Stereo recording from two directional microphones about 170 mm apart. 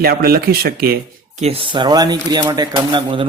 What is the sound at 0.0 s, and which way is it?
Speech, 65° right (ahead or behind).